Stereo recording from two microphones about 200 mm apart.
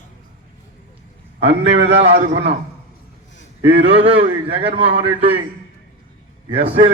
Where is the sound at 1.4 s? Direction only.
30° right (ahead or behind).